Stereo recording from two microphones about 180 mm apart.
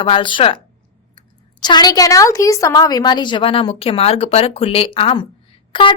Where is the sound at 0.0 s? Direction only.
25° left (ahead or behind).